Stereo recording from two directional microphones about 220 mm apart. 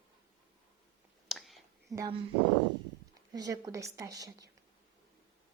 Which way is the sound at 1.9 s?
15° right (ahead or behind).